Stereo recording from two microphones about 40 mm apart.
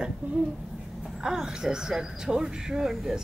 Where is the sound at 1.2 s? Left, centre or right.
Centre.